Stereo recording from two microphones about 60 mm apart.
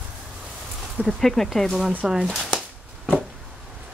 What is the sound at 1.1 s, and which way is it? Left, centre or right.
Speech, centre.